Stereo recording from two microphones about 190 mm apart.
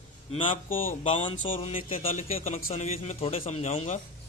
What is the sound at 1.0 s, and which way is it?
A man's voice, 30° left (ahead or behind).